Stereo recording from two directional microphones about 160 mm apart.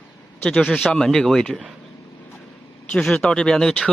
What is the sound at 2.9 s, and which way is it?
Speech, 5° left (ahead or behind).